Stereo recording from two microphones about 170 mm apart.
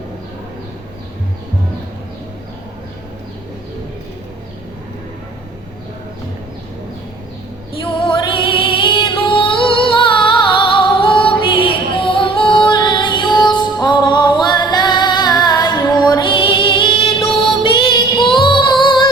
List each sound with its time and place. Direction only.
7.7 s music: 30° left (ahead or behind)